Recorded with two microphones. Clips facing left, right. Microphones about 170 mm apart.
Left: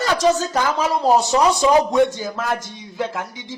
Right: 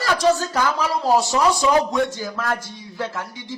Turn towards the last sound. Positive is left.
turn(degrees=20)  # may be behind; listen again after turning